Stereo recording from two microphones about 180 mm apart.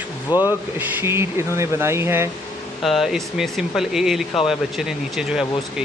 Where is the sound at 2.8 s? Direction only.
Centre (ahead or behind).